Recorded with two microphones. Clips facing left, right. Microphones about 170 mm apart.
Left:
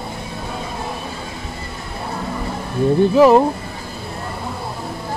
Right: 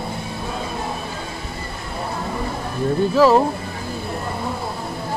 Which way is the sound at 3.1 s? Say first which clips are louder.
Left 3 dB; 15° left (ahead or behind).